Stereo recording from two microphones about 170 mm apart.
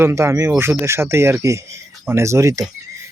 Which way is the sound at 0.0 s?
15° right (ahead or behind).